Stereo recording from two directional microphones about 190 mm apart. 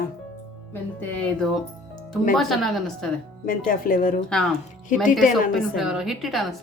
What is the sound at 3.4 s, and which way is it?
Speech, 45° left (ahead or behind).